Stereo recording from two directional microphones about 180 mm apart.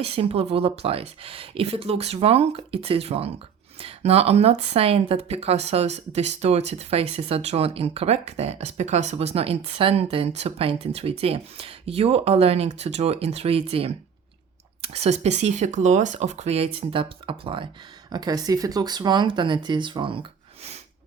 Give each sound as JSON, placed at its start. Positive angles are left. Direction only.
{"t": 0.0, "sound": "speech", "side_deg": -35}